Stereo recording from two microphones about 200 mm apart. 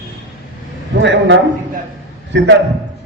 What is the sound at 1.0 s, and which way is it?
A man's voice, 65° right (ahead or behind).